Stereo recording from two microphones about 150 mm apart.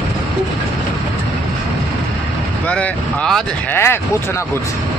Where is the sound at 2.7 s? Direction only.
5° left (ahead or behind).